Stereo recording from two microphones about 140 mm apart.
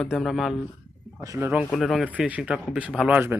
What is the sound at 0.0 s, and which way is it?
Speech, centre (ahead or behind).